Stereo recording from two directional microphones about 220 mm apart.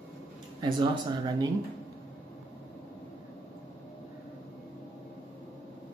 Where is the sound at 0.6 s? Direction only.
20° right (ahead or behind).